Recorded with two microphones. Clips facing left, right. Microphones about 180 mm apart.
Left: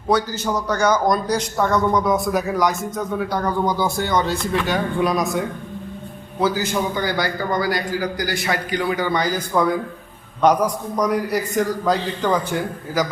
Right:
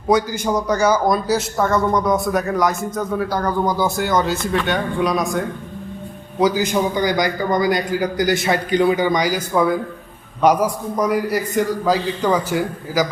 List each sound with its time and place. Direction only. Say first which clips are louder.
0.1 s a man's voice: right 3 dB; 10° right (ahead or behind)
6.4 s a man's voice: right 3 dB; 15° right (ahead or behind)